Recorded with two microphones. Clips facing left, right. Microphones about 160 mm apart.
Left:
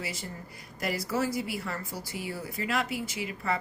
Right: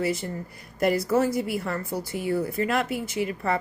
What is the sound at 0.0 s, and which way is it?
A woman's voice, 50° right (ahead or behind).